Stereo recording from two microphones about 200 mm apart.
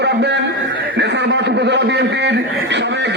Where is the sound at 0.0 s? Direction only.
60° right (ahead or behind).